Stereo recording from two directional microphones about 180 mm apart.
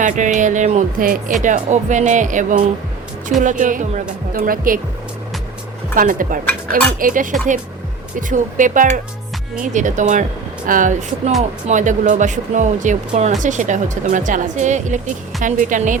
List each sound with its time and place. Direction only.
0.0 s speech: 45° right (ahead or behind)
5.9 s speech: 50° right (ahead or behind)